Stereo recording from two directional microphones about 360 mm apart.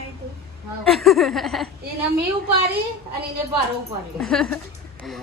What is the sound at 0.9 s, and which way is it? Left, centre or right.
Speech, centre.